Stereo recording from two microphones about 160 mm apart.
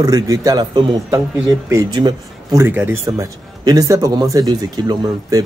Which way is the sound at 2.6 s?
15° right (ahead or behind).